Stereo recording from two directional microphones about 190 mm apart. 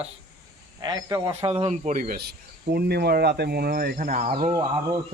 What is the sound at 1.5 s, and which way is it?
Speech, 35° right (ahead or behind).